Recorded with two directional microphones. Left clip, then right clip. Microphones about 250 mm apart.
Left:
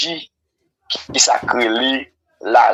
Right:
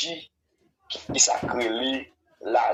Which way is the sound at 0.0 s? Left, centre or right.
Left.